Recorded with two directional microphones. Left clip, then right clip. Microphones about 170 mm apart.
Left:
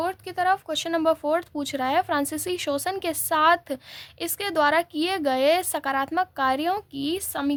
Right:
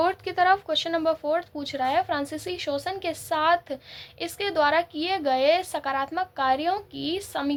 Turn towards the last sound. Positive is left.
turn(degrees=45)  # may be behind; listen again after turning